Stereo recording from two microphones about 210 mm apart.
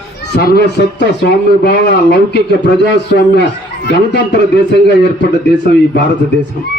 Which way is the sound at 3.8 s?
55° left (ahead or behind).